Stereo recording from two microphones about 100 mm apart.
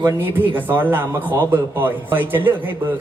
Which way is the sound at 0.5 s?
20° right (ahead or behind).